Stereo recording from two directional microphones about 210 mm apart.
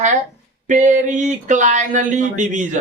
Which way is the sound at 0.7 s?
35° right (ahead or behind).